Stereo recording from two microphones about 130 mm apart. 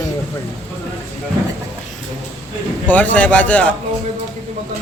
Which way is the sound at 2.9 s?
10° left (ahead or behind).